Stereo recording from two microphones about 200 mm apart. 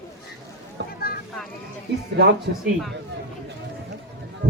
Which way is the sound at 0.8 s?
60° right (ahead or behind).